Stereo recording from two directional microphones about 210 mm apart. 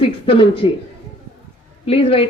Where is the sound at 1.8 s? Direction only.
25° left (ahead or behind).